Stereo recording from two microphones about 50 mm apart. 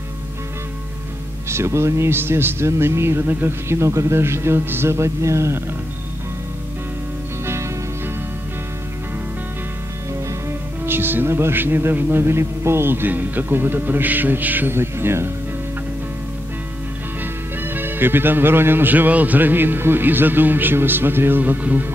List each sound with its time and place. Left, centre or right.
1.5 s a man's voice: right
3.6 s a man's voice: right
10.9 s speech: right
14.7 s a man's voice: right
17.2 s speech: right